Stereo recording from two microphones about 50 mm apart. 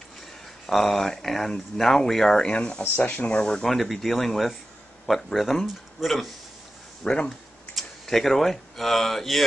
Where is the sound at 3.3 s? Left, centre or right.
Centre.